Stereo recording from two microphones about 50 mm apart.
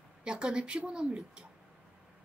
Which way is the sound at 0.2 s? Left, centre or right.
Centre.